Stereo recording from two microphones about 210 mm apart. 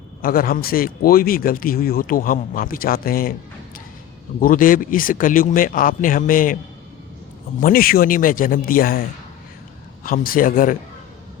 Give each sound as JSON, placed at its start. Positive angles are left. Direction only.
{"t": 0.2, "sound": "speech", "side_deg": 45}
{"t": 4.4, "sound": "speech", "side_deg": 40}
{"t": 7.6, "sound": "speech", "side_deg": 45}